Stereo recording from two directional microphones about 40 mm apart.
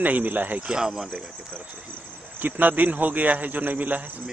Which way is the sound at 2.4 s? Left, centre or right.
Right.